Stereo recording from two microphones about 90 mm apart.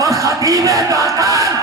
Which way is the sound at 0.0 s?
40° right (ahead or behind).